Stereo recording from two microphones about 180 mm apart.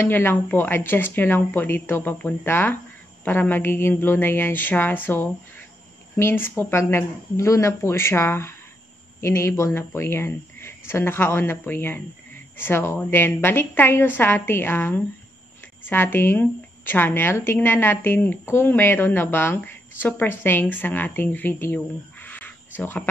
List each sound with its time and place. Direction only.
0.0 s a woman's voice: 10° left (ahead or behind)